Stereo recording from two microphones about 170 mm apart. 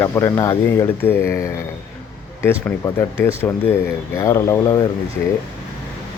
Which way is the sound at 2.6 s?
15° left (ahead or behind).